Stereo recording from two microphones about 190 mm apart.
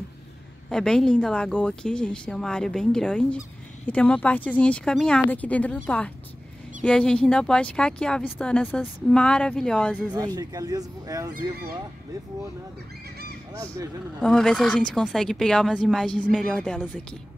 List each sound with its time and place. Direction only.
0.7 s speech: 5° left (ahead or behind)
10.1 s speech: 20° right (ahead or behind)
14.2 s speech: centre (ahead or behind)